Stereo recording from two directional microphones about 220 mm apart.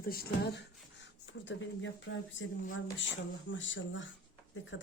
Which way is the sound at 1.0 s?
55° left (ahead or behind).